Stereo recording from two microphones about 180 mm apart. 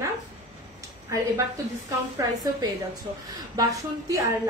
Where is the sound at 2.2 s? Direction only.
20° right (ahead or behind).